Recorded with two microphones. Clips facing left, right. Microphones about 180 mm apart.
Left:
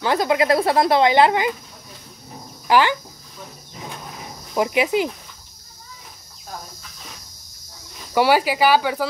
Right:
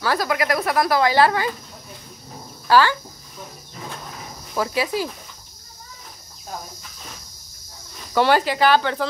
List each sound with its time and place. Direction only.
0.0 s speech: 20° left (ahead or behind)
2.7 s speech: 15° left (ahead or behind)
4.6 s speech: 20° left (ahead or behind)
8.1 s speech: 10° left (ahead or behind)